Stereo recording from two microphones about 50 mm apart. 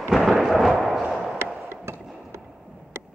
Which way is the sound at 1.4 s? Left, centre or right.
Right.